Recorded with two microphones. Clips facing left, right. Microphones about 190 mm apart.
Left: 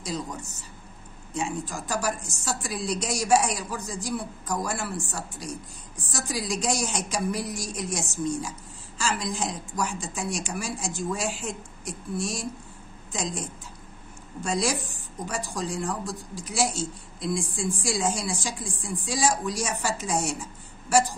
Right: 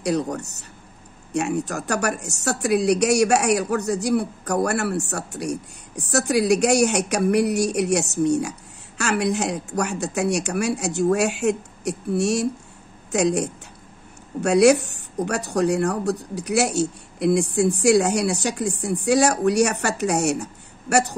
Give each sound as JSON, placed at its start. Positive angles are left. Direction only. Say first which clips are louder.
{"t": 0.0, "sound": "speech", "louder": "right 10 dB", "side_deg": -70}